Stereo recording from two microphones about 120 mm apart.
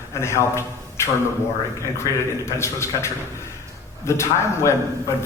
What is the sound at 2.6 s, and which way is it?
A man's voice, 25° left (ahead or behind).